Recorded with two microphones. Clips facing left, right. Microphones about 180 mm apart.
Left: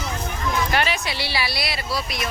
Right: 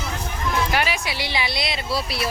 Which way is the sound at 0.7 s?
10° right (ahead or behind).